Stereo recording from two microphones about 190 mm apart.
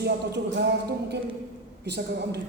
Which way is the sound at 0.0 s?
60° right (ahead or behind).